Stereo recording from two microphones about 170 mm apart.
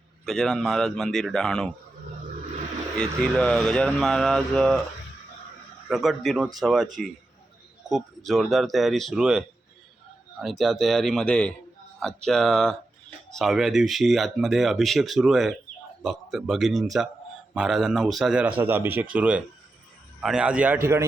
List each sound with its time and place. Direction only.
0.3 s speech: 5° left (ahead or behind)
3.0 s speech: 5° left (ahead or behind)
5.9 s speech: centre (ahead or behind)
7.9 s speech: centre (ahead or behind)
10.4 s speech: centre (ahead or behind)